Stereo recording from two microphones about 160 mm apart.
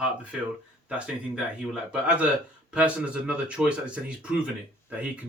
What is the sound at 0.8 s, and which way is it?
Speech, 5° right (ahead or behind).